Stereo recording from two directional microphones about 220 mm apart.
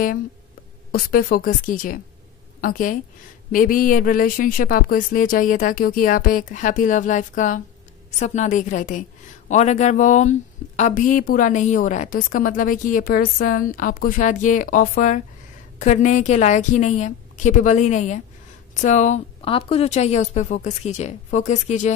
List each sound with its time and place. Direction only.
0.9 s a woman's voice: 40° left (ahead or behind)